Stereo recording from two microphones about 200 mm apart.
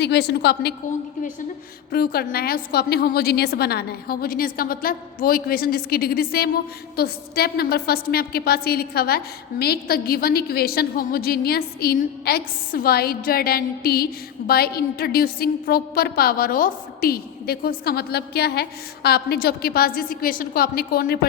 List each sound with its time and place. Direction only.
0.0 s a woman's voice: 55° left (ahead or behind)
1.9 s a woman's voice: 50° left (ahead or behind)